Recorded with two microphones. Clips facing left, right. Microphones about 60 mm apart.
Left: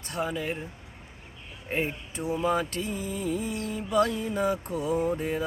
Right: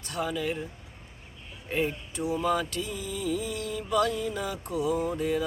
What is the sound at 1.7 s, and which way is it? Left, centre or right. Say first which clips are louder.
Mantra: right 1 dB; left.